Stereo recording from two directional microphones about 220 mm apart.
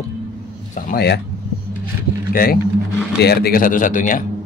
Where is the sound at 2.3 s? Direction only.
40° left (ahead or behind).